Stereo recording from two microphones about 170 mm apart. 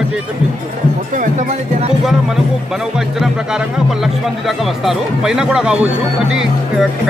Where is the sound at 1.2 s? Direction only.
45° right (ahead or behind).